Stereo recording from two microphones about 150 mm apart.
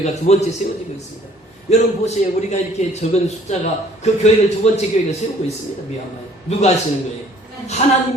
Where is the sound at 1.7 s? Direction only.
45° left (ahead or behind).